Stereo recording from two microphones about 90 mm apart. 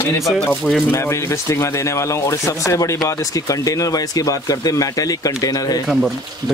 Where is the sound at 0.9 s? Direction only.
35° left (ahead or behind).